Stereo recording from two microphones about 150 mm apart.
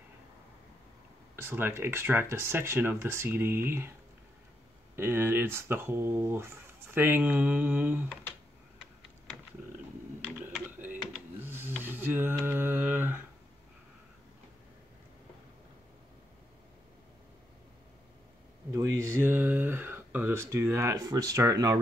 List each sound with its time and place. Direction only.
1.3 s speech: 15° right (ahead or behind)
4.9 s speech: 15° right (ahead or behind)
10.2 s computer keyboard: 10° right (ahead or behind)
11.3 s printer: 15° right (ahead or behind)
11.8 s a sound: 15° right (ahead or behind)
18.7 s a sound: 20° right (ahead or behind)